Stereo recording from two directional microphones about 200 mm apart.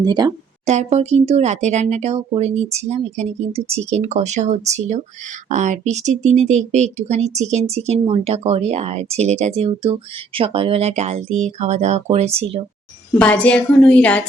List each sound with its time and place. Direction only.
0.0 s speech: 20° right (ahead or behind)
0.6 s speech: 35° right (ahead or behind)
13.1 s a woman's voice: 5° left (ahead or behind)